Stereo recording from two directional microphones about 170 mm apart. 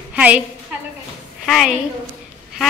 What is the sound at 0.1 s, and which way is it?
Speech, 10° right (ahead or behind).